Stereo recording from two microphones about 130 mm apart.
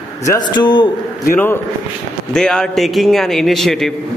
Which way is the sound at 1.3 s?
15° left (ahead or behind).